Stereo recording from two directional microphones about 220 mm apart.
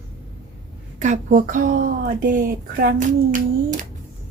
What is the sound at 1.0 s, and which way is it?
Speech, 35° right (ahead or behind).